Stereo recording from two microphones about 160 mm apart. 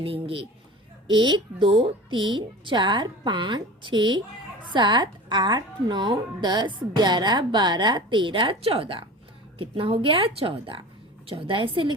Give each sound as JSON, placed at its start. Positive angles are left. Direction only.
{"t": 0.0, "sound": "a woman's voice", "side_deg": -35}